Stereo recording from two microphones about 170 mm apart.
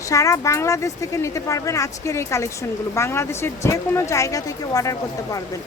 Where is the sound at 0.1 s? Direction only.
20° left (ahead or behind).